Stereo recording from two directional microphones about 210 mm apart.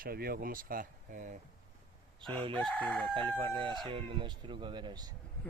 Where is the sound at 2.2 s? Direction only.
20° right (ahead or behind).